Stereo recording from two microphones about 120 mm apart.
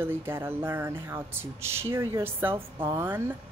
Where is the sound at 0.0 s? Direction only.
20° right (ahead or behind).